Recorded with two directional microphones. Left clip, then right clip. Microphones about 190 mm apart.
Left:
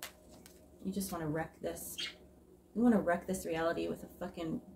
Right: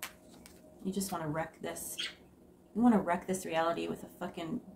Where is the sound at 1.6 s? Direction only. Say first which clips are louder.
Even; 10° right (ahead or behind).